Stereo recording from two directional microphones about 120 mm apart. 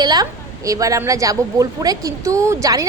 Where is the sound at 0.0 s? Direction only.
35° right (ahead or behind).